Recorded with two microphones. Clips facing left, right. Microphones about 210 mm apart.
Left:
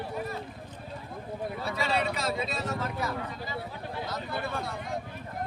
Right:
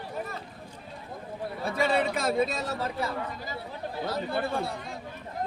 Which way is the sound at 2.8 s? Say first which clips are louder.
Right 1 dB; 35° right (ahead or behind).